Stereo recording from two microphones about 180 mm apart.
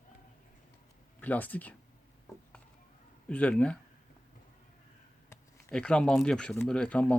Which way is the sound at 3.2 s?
5° left (ahead or behind).